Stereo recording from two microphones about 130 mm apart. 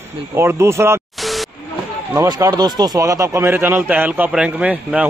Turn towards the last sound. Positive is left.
turn(degrees=-10)  # may be behind; listen again after turning